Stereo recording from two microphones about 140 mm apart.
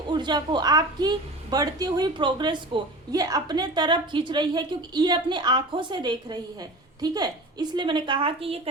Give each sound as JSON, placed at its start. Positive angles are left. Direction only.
{"t": 0.1, "sound": "a woman's voice", "side_deg": -30}